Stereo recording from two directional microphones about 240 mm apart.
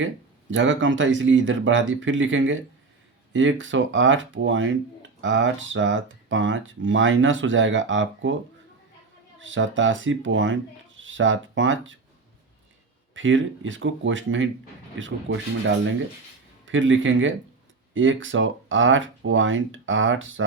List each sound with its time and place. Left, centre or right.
0.5 s speech: right
9.4 s speech: right
13.1 s speech: right